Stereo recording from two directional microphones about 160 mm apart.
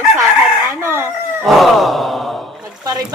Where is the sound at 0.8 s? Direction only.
15° right (ahead or behind).